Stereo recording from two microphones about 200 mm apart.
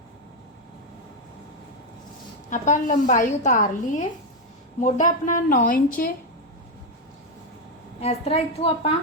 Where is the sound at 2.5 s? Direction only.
40° left (ahead or behind).